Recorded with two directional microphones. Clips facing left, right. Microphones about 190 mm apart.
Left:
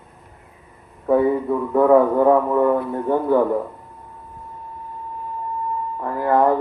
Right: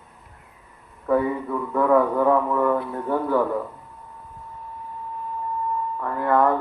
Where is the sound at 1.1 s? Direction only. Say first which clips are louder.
Left 5 dB; 25° left (ahead or behind).